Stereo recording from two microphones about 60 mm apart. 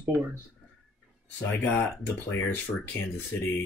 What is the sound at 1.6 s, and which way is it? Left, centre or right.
Speech, left.